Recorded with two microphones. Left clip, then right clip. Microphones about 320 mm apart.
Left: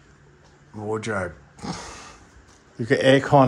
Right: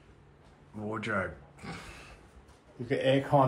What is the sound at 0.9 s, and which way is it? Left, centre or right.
A man's voice, centre.